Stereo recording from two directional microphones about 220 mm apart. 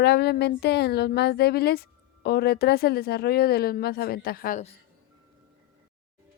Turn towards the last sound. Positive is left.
turn(degrees=35)  # may be behind; listen again after turning